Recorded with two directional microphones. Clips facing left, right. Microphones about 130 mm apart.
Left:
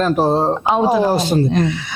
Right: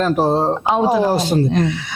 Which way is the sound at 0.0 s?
25° left (ahead or behind).